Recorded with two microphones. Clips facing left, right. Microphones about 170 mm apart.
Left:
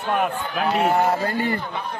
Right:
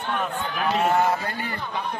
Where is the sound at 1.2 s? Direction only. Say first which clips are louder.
Left 8 dB; 40° left (ahead or behind).